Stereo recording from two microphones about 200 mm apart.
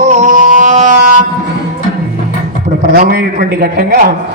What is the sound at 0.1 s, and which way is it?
Music, 40° right (ahead or behind).